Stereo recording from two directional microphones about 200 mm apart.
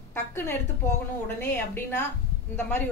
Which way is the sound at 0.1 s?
10° left (ahead or behind).